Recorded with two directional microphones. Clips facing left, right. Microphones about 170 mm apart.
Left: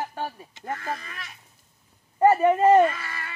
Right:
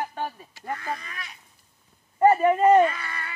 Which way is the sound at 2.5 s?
Centre (ahead or behind).